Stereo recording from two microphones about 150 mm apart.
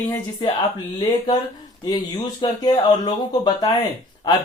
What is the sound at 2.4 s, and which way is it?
Speech, 30° left (ahead or behind).